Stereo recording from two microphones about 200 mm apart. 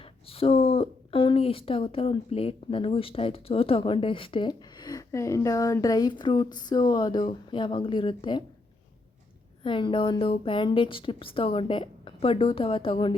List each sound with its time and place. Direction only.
0.0 s speech: 30° left (ahead or behind)
9.6 s speech: 25° left (ahead or behind)